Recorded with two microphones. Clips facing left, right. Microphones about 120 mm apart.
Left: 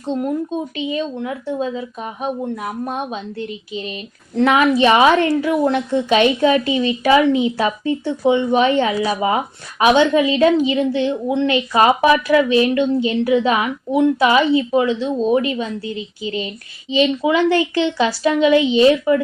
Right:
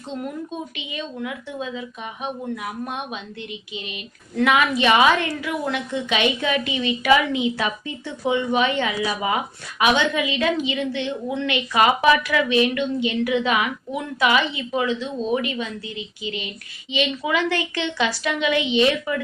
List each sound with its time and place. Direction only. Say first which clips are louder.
0.2 s a woman's voice: left 8 dB; 35° left (ahead or behind)